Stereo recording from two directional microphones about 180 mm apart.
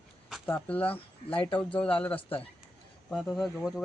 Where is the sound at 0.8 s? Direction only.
30° left (ahead or behind).